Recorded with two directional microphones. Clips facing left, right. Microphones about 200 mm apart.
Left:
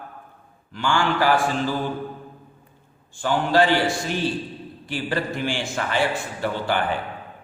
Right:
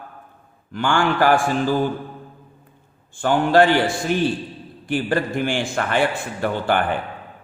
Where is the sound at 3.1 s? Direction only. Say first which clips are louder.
Right 4 dB; 55° right (ahead or behind).